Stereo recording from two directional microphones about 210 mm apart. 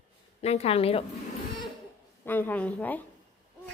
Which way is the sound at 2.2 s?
10° left (ahead or behind).